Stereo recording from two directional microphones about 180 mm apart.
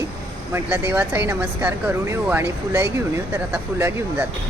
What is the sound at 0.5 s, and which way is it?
Speech, 10° right (ahead or behind).